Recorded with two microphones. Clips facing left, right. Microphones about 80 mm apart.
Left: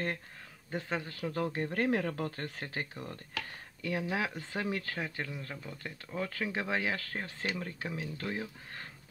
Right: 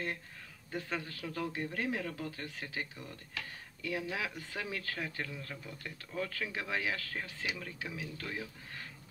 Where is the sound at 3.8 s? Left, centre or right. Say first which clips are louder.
Left 4 dB; left.